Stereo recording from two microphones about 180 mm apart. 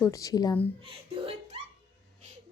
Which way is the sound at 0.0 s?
20° left (ahead or behind).